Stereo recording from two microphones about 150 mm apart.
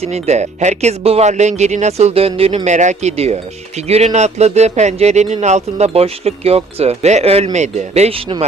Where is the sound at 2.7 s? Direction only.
50° right (ahead or behind).